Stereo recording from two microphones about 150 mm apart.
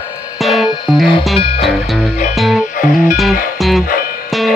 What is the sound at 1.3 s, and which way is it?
Music, 40° left (ahead or behind).